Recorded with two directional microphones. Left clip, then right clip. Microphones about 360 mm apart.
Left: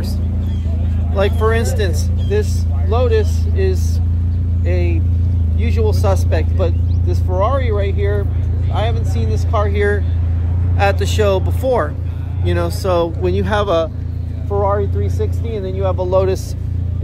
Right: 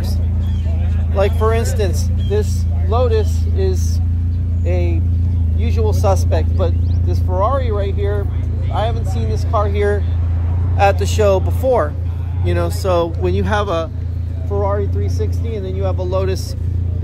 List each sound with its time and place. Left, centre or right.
1.1 s speech: centre